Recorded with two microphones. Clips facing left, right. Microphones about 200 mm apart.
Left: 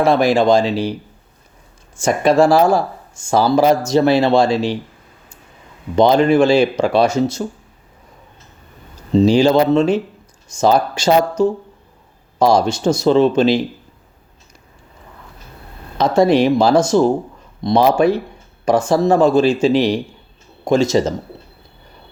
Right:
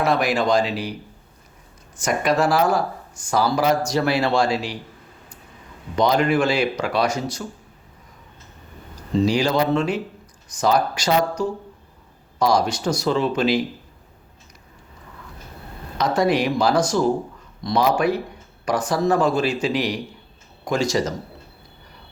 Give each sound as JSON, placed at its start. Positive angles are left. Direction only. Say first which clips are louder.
{"t": 0.0, "sound": "speech", "louder": "left 7 dB", "side_deg": 30}
{"t": 2.0, "sound": "speech", "louder": "left 7 dB", "side_deg": 30}
{"t": 6.0, "sound": "speech", "louder": "left 7 dB", "side_deg": 25}
{"t": 9.1, "sound": "speech", "louder": "left 7 dB", "side_deg": 25}
{"t": 16.0, "sound": "speech", "louder": "left 7 dB", "side_deg": 25}